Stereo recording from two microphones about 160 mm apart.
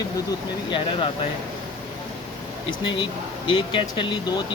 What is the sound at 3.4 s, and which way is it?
Speech, 30° left (ahead or behind).